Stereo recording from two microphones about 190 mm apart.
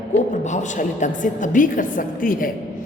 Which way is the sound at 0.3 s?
40° left (ahead or behind).